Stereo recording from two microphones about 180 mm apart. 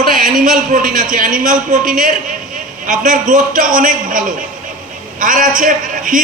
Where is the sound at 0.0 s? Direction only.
45° right (ahead or behind).